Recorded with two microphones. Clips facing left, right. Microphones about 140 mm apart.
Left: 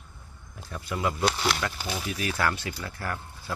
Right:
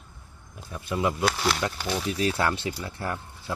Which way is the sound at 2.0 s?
30° right (ahead or behind).